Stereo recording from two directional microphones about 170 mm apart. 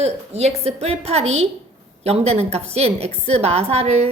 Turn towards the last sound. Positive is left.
turn(degrees=-40)  # may be behind; listen again after turning